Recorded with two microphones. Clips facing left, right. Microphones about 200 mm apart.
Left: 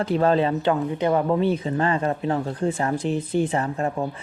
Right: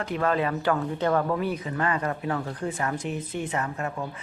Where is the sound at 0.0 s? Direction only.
30° left (ahead or behind).